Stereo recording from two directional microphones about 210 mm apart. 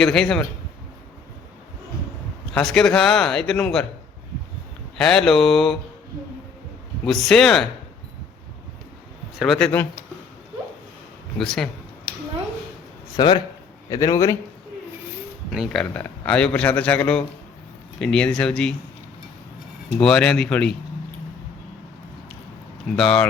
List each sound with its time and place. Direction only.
0.0 s a man's voice: 5° left (ahead or behind)
2.5 s a man's voice: centre (ahead or behind)
4.9 s a man's voice: centre (ahead or behind)
7.0 s a man's voice: centre (ahead or behind)
9.4 s a man's voice: centre (ahead or behind)
11.3 s a man's voice: centre (ahead or behind)
13.1 s a man's voice: 25° left (ahead or behind)
15.4 s a man's voice: centre (ahead or behind)
20.0 s a man's voice: 5° left (ahead or behind)
23.0 s a man's voice: 5° left (ahead or behind)